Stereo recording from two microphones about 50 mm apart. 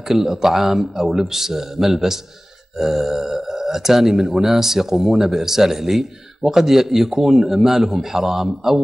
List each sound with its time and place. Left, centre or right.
0.1 s speech: centre